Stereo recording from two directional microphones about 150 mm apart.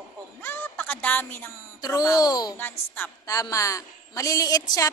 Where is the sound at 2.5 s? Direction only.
15° left (ahead or behind).